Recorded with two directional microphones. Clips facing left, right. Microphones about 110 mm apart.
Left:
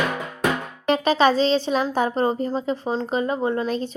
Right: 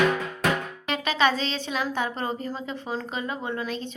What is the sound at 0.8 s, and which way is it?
Speech, 35° left (ahead or behind).